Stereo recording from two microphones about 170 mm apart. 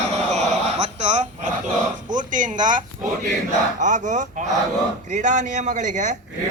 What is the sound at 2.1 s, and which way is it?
A man's voice, 50° right (ahead or behind).